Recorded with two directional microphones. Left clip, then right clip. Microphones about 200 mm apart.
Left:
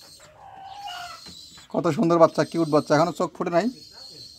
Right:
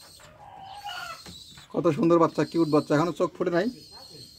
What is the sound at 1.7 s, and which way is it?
Speech, 45° left (ahead or behind).